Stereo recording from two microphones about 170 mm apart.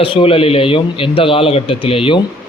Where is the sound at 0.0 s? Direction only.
30° left (ahead or behind).